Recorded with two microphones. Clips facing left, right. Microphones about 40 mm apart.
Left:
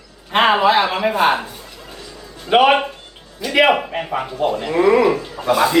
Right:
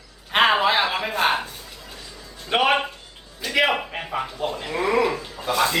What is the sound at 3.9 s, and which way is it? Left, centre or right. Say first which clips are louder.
Speech: left 6 dB; left.